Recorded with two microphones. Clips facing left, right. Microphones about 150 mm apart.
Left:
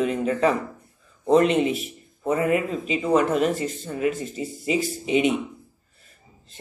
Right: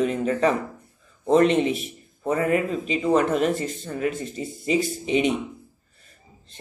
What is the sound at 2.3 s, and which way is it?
Speech, 45° right (ahead or behind).